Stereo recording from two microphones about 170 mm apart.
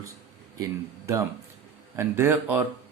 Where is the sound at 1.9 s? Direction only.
15° right (ahead or behind).